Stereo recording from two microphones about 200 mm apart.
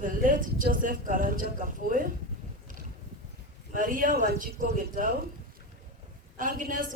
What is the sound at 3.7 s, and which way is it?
Speech, 40° right (ahead or behind).